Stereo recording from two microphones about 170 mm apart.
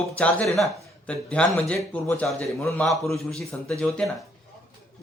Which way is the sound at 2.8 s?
Centre (ahead or behind).